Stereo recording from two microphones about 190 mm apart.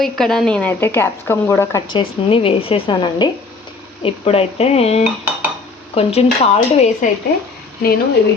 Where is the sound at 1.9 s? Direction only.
30° left (ahead or behind).